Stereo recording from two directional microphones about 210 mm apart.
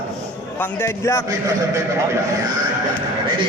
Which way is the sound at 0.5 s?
10° left (ahead or behind).